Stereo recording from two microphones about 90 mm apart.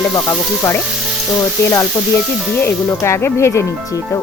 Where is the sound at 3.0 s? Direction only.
25° left (ahead or behind).